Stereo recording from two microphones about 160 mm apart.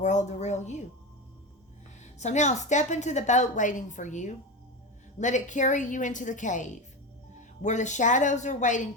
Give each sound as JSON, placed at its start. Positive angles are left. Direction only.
{"t": 0.0, "sound": "a woman's voice", "side_deg": 50}
{"t": 2.0, "sound": "a woman's voice", "side_deg": 45}